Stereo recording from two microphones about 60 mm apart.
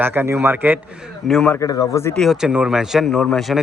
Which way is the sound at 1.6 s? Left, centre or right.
Left.